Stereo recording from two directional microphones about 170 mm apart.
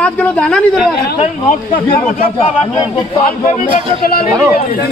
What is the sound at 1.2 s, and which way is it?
Speech, 45° left (ahead or behind).